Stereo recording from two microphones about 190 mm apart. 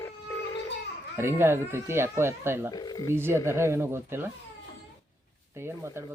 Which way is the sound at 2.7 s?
20° left (ahead or behind).